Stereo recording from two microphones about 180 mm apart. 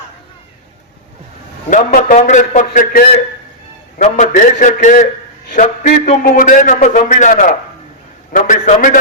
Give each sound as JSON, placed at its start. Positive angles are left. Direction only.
{"t": 1.7, "sound": "a man's voice", "side_deg": 45}
{"t": 6.1, "sound": "a man's voice", "side_deg": 45}